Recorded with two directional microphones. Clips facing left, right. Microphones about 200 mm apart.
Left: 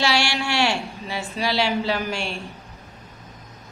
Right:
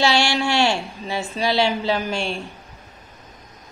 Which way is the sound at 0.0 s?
25° right (ahead or behind).